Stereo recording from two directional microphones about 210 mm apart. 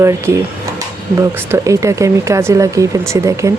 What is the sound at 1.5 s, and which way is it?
Speech, 15° right (ahead or behind).